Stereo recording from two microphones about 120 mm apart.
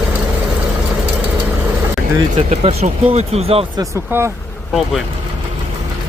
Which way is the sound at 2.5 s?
65° right (ahead or behind).